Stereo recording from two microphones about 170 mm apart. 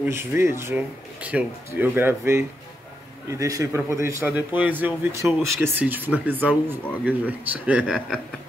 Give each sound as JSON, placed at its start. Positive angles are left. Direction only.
{"t": 0.0, "sound": "speech", "side_deg": -15}